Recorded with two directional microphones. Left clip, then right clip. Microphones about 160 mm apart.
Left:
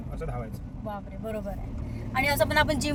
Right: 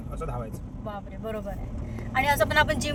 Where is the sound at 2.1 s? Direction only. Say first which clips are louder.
Right 2 dB; 30° left (ahead or behind).